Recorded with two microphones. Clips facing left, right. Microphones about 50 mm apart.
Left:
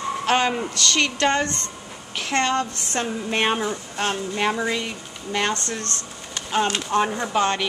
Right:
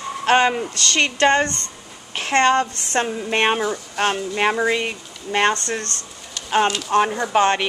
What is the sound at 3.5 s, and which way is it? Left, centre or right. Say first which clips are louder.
Speech: right 3 dB; right.